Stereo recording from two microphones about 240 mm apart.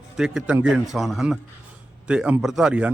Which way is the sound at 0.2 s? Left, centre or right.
Centre.